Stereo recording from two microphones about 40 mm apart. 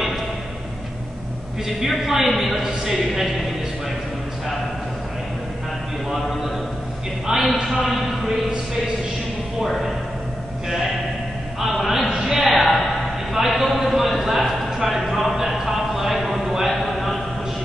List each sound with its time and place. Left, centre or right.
1.9 s a man's voice: centre
7.2 s a man's voice: centre
9.7 s a man's voice: centre
12.1 s a sound: centre